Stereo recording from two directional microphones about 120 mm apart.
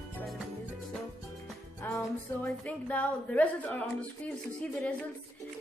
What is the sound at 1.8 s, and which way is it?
Music, 15° left (ahead or behind).